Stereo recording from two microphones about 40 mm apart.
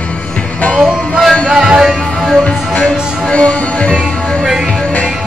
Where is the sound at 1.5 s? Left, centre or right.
Centre.